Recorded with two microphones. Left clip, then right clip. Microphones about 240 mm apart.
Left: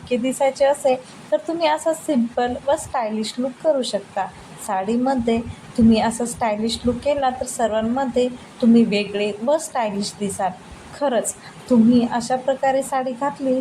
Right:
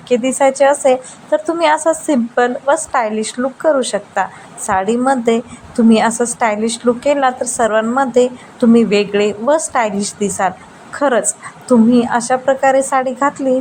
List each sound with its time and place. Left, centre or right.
0.1 s a woman's voice: centre
11.9 s a woman's voice: centre